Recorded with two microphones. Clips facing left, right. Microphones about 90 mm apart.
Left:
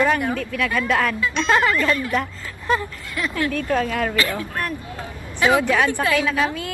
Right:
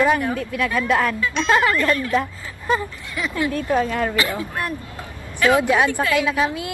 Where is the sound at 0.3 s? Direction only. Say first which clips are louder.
Right 1 dB; 10° right (ahead or behind).